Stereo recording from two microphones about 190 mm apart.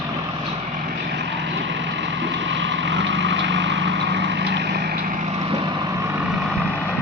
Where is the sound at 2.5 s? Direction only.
70° right (ahead or behind).